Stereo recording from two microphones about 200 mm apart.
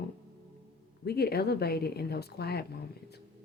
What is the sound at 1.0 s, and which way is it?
Speech, 50° left (ahead or behind).